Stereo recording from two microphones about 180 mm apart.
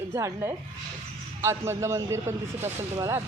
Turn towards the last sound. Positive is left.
turn(degrees=-15)  # may be behind; listen again after turning